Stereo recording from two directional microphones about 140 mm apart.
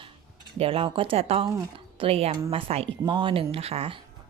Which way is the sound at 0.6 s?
40° right (ahead or behind).